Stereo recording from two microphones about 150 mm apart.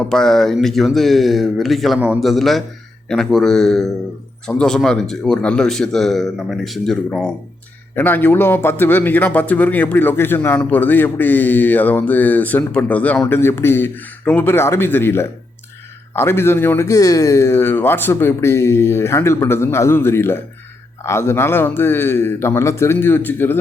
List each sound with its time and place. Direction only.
0.1 s speech: 5° left (ahead or behind)